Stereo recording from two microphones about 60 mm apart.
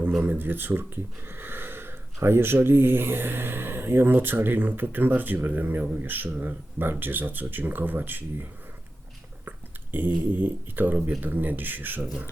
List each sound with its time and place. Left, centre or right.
0.2 s speech: right
9.5 s speech: right